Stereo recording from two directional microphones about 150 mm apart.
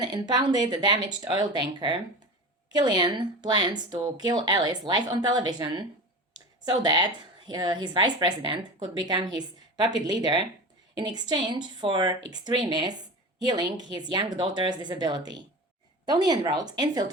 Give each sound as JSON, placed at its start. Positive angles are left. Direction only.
{"t": 0.0, "sound": "a woman's voice", "side_deg": -25}